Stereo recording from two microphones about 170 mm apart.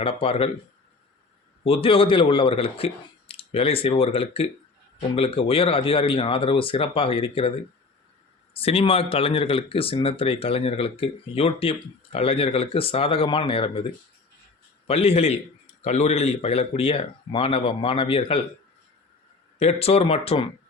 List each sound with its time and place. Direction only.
0.0 s speech: 35° left (ahead or behind)
1.6 s speech: 35° left (ahead or behind)
8.5 s speech: 35° left (ahead or behind)
14.8 s speech: 35° left (ahead or behind)
19.5 s speech: 40° left (ahead or behind)